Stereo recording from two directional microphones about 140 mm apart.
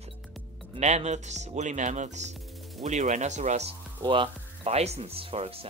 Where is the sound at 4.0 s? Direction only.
35° right (ahead or behind).